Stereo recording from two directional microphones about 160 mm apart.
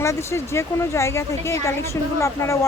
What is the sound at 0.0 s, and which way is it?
A woman's voice, 15° left (ahead or behind).